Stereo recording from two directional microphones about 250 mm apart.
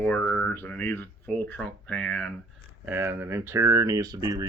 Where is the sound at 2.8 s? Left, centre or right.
Centre.